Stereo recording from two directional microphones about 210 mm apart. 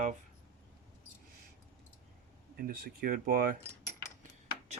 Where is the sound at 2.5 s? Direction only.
45° right (ahead or behind).